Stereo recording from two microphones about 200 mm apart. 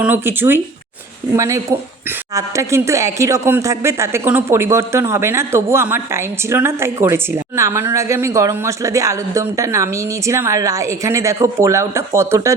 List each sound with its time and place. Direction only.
0.0 s speech: 10° right (ahead or behind)